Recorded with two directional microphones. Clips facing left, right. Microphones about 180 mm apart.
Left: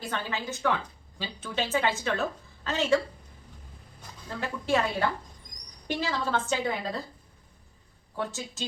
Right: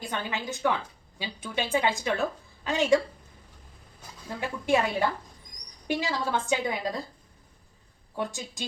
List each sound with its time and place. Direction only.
0.0 s a woman's voice: 15° right (ahead or behind)
4.3 s a woman's voice: 15° right (ahead or behind)
8.1 s a woman's voice: 15° right (ahead or behind)